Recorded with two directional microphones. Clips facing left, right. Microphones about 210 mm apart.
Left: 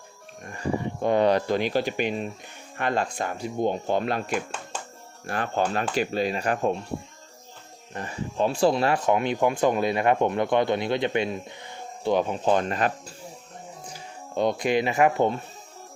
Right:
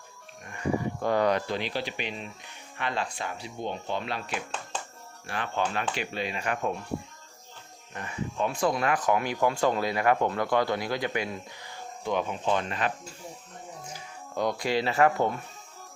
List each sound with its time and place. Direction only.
0.5 s a sound: 30° left (ahead or behind)
1.5 s speech: 45° left (ahead or behind); by 6.8 s 30° left (ahead or behind)
7.9 s speech: 35° left (ahead or behind)
12.1 s speech: 40° left (ahead or behind)
14.3 s speech: 25° left (ahead or behind)